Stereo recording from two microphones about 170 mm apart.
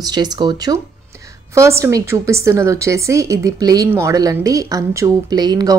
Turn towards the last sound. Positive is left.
turn(degrees=-25)  # may be behind; listen again after turning